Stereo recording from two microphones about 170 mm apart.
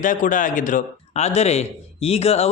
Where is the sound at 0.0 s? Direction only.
50° left (ahead or behind).